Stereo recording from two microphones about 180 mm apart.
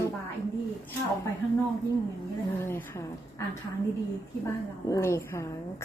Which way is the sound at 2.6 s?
15° left (ahead or behind).